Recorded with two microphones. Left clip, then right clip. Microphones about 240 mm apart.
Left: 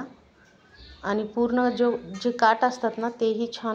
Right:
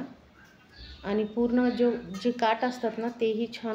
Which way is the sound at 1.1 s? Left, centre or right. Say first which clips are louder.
Left 2 dB; centre.